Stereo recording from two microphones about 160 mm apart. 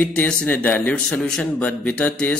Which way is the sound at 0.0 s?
10° left (ahead or behind).